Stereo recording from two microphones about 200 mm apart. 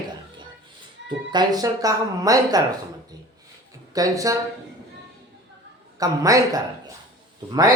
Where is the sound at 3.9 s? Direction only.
15° right (ahead or behind).